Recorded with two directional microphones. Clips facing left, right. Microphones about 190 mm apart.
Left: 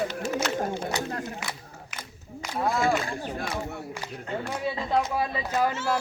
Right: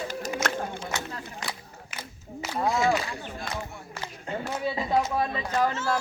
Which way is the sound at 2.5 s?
Centre (ahead or behind).